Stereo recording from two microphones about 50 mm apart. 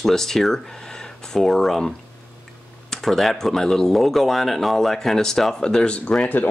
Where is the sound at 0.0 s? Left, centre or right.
Centre.